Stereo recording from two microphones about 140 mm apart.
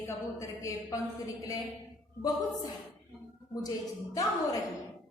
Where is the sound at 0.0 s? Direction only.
20° left (ahead or behind).